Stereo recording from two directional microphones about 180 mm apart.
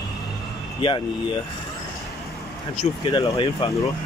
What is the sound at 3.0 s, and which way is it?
Speech, 25° left (ahead or behind).